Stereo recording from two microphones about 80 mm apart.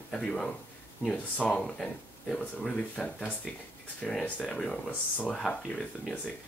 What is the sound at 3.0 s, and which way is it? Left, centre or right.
Speech, centre.